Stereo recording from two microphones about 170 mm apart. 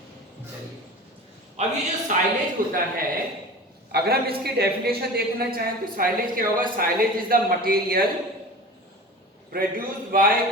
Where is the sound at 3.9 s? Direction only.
65° right (ahead or behind).